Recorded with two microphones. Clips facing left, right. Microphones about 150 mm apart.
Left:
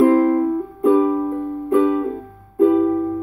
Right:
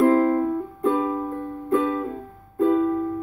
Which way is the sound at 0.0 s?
5° left (ahead or behind).